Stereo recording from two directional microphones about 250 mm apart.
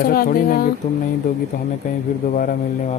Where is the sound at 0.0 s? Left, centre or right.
Left.